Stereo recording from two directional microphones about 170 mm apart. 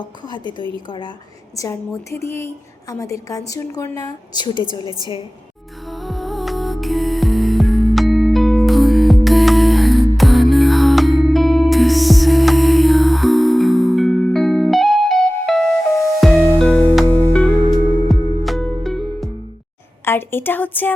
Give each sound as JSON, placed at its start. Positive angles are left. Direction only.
{"t": 0.0, "sound": "a woman's voice", "side_deg": 25}
{"t": 5.9, "sound": "music", "side_deg": 0}
{"t": 20.1, "sound": "a woman's voice", "side_deg": 15}